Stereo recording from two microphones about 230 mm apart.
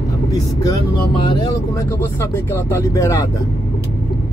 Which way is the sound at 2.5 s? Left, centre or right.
Centre.